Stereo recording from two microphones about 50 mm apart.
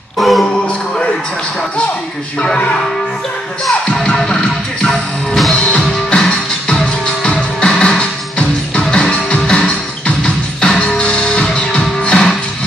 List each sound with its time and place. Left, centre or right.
0.2 s music: centre
0.5 s music: centre
2.4 s speech: centre
3.6 s music: centre